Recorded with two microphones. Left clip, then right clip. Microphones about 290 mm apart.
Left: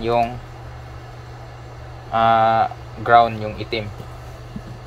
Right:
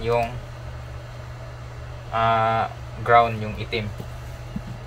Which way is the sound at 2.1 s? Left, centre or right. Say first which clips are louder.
Left 5 dB; left.